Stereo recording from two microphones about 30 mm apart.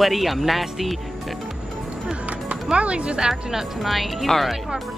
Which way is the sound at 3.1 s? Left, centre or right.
Right.